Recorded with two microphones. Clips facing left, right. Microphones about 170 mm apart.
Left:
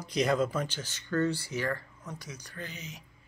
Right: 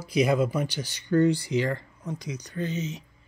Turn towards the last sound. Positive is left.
turn(degrees=-25)  # may be behind; listen again after turning